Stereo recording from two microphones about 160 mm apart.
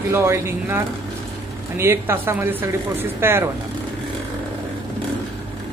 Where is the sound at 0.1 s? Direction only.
15° right (ahead or behind).